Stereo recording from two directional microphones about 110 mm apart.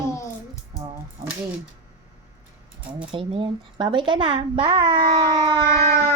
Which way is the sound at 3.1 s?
55° right (ahead or behind).